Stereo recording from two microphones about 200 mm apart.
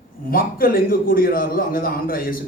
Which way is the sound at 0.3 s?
45° left (ahead or behind).